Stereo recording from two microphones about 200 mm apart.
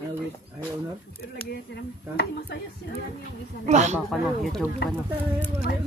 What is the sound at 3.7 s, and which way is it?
Speech, 35° right (ahead or behind).